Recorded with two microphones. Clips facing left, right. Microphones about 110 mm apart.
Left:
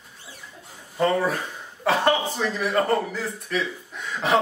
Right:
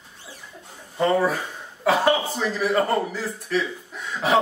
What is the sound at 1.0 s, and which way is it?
A man's voice, centre (ahead or behind).